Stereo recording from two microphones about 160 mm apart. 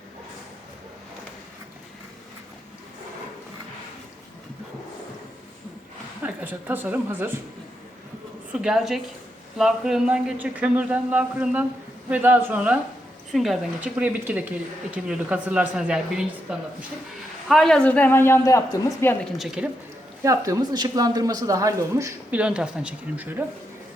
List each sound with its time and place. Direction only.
6.2 s speech: 10° right (ahead or behind)
8.6 s a woman's voice: 5° right (ahead or behind); by 19.1 s 20° left (ahead or behind)
19.2 s a woman's voice: centre (ahead or behind)
20.2 s a woman's voice: 20° right (ahead or behind)
22.4 s speech: 5° right (ahead or behind)